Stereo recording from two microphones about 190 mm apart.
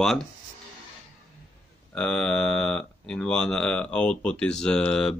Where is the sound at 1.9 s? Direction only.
5° left (ahead or behind).